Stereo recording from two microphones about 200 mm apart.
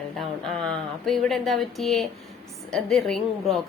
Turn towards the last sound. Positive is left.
turn(degrees=0)  # may be behind; listen again after turning